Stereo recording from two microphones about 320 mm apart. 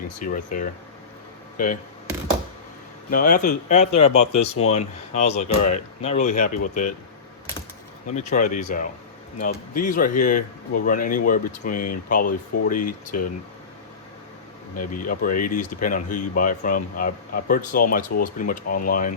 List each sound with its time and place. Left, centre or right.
0.2 s speech: left
3.1 s speech: left
8.1 s speech: left
11.7 s speech: left
12.0 s speech: left
14.8 s speech: left